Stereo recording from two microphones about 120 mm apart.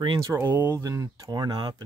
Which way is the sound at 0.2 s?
25° right (ahead or behind).